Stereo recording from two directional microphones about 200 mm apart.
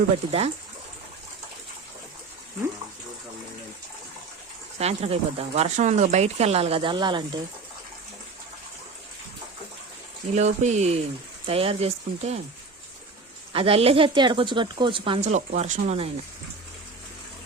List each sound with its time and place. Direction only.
0.3 s speech: 30° right (ahead or behind)
4.8 s speech: 30° right (ahead or behind)
10.3 s speech: 35° right (ahead or behind)
13.5 s speech: 30° right (ahead or behind)